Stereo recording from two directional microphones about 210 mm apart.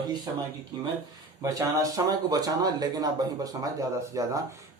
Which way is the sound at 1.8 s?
15° right (ahead or behind).